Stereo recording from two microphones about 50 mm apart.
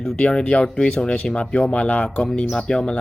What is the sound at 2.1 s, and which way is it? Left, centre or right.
Speech, centre.